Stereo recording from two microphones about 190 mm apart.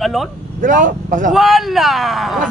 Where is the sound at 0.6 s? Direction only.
45° right (ahead or behind).